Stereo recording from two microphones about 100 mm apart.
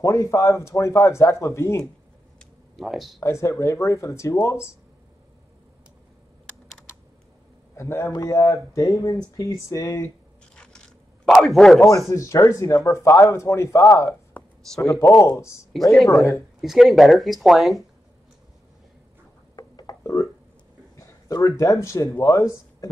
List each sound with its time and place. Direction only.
0.0 s speech: 30° left (ahead or behind)
2.3 s a sound: centre (ahead or behind)
3.2 s speech: 30° left (ahead or behind)
7.7 s a man's voice: 25° left (ahead or behind)
8.1 s speech: 35° left (ahead or behind)
10.5 s scissors: 10° left (ahead or behind)
11.2 s speech: centre (ahead or behind)
12.1 s speech: 30° left (ahead or behind)
14.3 s a sound: 15° left (ahead or behind)
14.8 s speech: 30° left (ahead or behind)
15.9 s speech: centre (ahead or behind)
19.5 s a sound: 40° left (ahead or behind)
20.9 s speech: 35° left (ahead or behind)